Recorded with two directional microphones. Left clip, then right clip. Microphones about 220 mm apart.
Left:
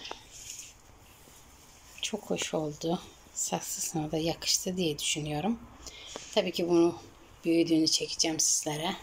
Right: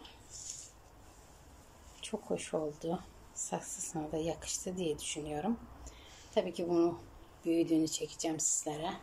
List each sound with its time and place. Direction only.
2.0 s speech: centre (ahead or behind)